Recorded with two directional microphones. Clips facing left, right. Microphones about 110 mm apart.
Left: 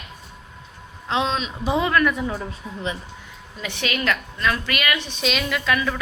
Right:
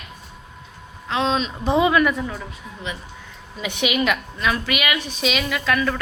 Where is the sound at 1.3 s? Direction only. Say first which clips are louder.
Right 3 dB; 5° left (ahead or behind).